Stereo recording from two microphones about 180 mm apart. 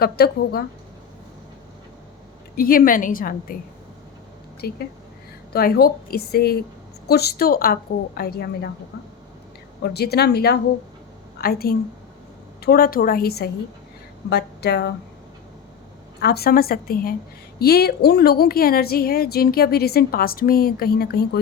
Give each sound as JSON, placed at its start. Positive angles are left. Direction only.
{"t": 0.0, "sound": "a woman's voice", "side_deg": 60}
{"t": 2.6, "sound": "a woman's voice", "side_deg": 50}
{"t": 4.6, "sound": "a woman's voice", "side_deg": 60}
{"t": 9.8, "sound": "a woman's voice", "side_deg": 65}
{"t": 16.2, "sound": "a woman's voice", "side_deg": 60}